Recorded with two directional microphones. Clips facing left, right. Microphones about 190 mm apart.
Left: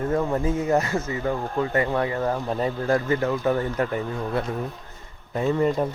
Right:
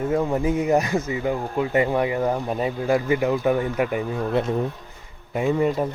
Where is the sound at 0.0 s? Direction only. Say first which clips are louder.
Right 2 dB; 10° right (ahead or behind).